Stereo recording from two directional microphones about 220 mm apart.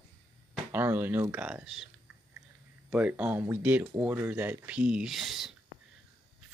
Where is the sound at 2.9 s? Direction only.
5° right (ahead or behind).